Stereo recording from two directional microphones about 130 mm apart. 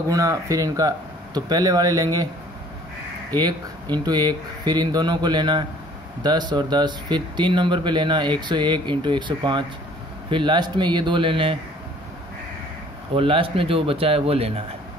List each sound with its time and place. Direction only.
0.1 s speech: 25° right (ahead or behind)
3.3 s speech: 35° right (ahead or behind)
13.1 s speech: 45° right (ahead or behind)